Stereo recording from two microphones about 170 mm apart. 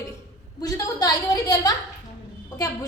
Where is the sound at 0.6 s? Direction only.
20° left (ahead or behind).